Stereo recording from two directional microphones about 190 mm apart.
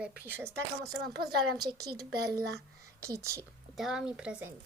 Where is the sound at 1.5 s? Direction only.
20° right (ahead or behind).